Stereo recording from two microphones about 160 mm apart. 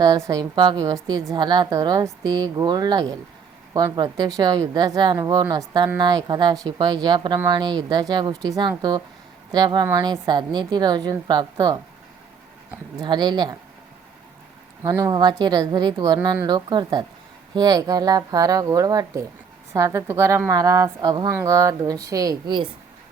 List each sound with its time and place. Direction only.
0.0 s a woman's voice: 25° right (ahead or behind)
13.0 s a woman's voice: 25° right (ahead or behind)
14.8 s a woman's voice: 25° right (ahead or behind)